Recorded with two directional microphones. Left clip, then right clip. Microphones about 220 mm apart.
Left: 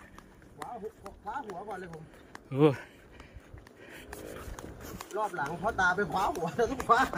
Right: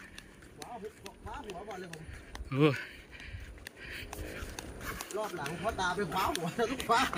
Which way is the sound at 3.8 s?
10° left (ahead or behind).